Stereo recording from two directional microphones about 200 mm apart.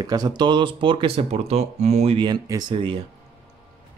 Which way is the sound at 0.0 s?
20° right (ahead or behind).